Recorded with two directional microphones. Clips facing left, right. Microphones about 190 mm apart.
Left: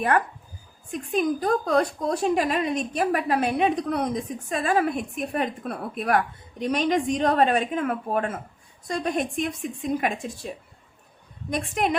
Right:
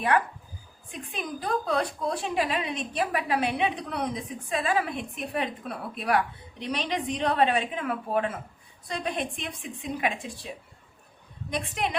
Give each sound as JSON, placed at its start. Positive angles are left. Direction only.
{"t": 0.1, "sound": "a woman's voice", "side_deg": 45}
{"t": 11.5, "sound": "a woman's voice", "side_deg": 50}